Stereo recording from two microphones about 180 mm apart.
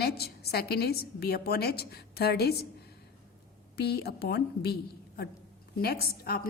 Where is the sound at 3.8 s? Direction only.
60° left (ahead or behind).